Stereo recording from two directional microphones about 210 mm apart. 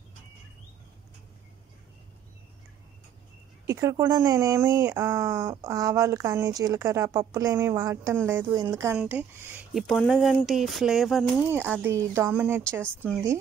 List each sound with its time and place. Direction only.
3.6 s speech: 15° right (ahead or behind)